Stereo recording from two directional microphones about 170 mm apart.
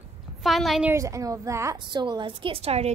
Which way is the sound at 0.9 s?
20° right (ahead or behind).